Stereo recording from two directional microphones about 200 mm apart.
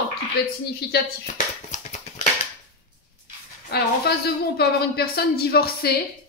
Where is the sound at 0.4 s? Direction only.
50° left (ahead or behind).